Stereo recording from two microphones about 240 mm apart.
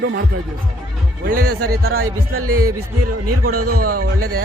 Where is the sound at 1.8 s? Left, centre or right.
Right.